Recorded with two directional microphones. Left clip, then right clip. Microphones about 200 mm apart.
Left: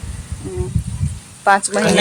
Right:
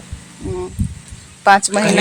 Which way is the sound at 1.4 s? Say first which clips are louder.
Right 2 dB; 20° right (ahead or behind).